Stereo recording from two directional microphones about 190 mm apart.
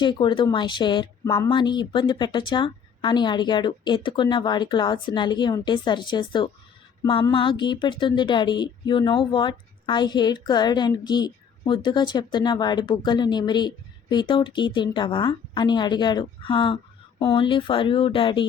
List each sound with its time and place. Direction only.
0.0 s a woman's voice: 25° left (ahead or behind)